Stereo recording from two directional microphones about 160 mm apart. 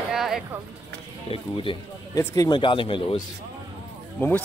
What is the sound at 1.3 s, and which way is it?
Speech, 35° left (ahead or behind).